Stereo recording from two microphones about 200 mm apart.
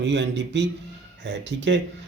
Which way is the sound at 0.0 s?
60° right (ahead or behind).